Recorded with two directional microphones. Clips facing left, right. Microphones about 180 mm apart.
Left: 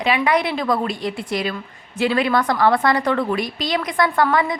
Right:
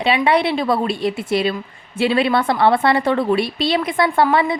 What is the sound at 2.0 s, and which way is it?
A woman's voice, 25° right (ahead or behind).